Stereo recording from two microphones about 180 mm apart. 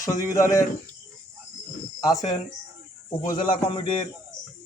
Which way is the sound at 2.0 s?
20° left (ahead or behind).